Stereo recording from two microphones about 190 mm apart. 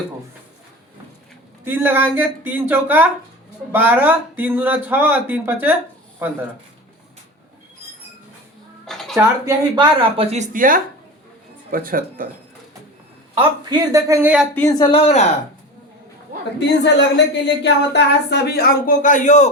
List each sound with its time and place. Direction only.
1.6 s speech: 10° right (ahead or behind)
8.9 s a sound: centre (ahead or behind)
9.1 s speech: 20° right (ahead or behind)
10.2 s a woman's voice: 40° right (ahead or behind)
13.3 s speech: 25° right (ahead or behind); by 14.4 s 10° right (ahead or behind)
14.7 s speech: 25° left (ahead or behind)
16.6 s speech: 65° left (ahead or behind); by 19.5 s 40° left (ahead or behind)